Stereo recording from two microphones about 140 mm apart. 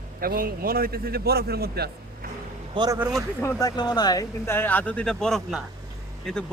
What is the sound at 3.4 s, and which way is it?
A man's voice, 20° left (ahead or behind).